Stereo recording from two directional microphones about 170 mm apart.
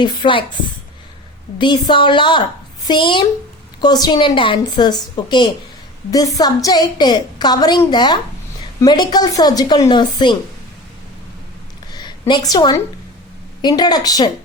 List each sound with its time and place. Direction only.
0.0 s a woman's voice: 25° left (ahead or behind)
1.5 s a woman's voice: 25° left (ahead or behind)
11.9 s a sound: 25° left (ahead or behind)
13.6 s a woman's voice: 25° left (ahead or behind)